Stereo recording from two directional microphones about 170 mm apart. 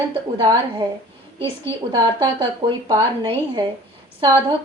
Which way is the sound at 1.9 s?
25° right (ahead or behind).